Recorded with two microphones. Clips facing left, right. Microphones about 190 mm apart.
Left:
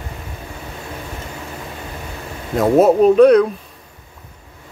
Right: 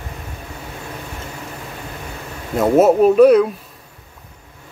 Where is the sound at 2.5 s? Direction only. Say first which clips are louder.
Even; centre (ahead or behind).